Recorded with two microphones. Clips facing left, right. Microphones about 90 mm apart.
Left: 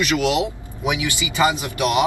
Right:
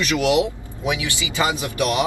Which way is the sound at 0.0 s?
20° left (ahead or behind).